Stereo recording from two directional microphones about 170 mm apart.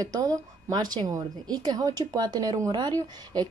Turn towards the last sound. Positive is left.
turn(degrees=-25)  # may be behind; listen again after turning